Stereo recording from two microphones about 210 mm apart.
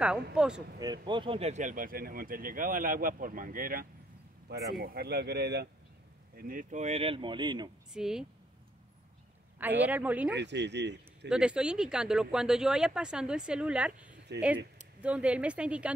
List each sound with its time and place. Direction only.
0.0 s speech: 5° right (ahead or behind)
0.7 s speech: 20° right (ahead or behind)
7.9 s speech: 5° right (ahead or behind)
9.6 s a man's voice: 10° right (ahead or behind)
10.3 s speech: 55° right (ahead or behind)
11.2 s speech: 5° right (ahead or behind)